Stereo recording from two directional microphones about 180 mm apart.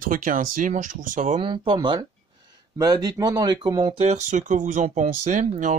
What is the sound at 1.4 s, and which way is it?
Speech, 30° right (ahead or behind).